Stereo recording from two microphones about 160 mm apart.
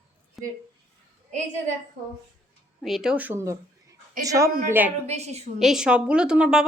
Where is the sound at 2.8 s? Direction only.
Centre (ahead or behind).